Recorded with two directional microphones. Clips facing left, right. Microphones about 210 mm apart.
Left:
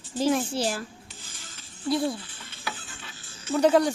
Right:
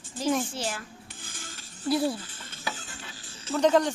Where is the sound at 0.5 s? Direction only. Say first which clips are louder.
Left 6 dB; 35° left (ahead or behind).